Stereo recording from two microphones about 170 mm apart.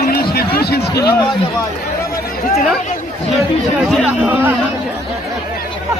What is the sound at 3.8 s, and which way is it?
Chatter, 10° right (ahead or behind).